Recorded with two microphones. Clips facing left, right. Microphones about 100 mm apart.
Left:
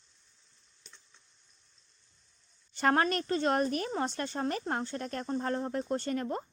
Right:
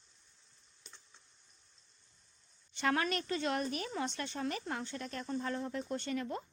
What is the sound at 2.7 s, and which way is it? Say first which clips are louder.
A woman's voice: left 6 dB; 40° left (ahead or behind).